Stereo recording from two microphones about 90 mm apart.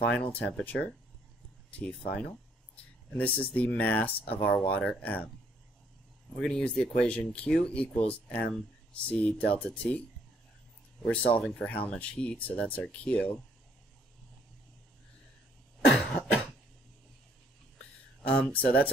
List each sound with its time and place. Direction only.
0.0 s speech: 15° left (ahead or behind)
6.4 s speech: 10° left (ahead or behind)
11.1 s speech: 15° left (ahead or behind)
15.9 s cough: 10° left (ahead or behind)
18.5 s speech: 15° left (ahead or behind)